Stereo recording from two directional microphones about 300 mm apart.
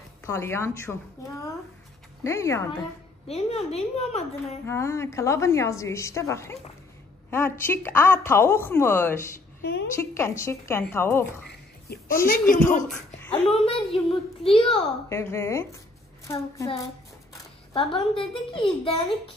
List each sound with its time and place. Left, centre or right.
0.3 s a woman's voice: centre
2.2 s a woman's voice: centre
3.3 s a woman's voice: centre
4.6 s a woman's voice: centre
11.4 s a sound: left
12.9 s a sound: centre
13.5 s a woman's voice: centre